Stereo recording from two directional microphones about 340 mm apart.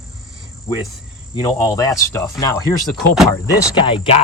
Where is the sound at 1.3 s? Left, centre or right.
Centre.